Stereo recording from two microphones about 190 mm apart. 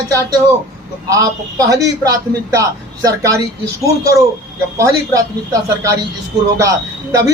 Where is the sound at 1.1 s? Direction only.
20° right (ahead or behind).